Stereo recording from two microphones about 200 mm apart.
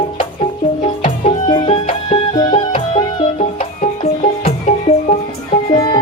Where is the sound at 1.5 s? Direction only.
25° left (ahead or behind).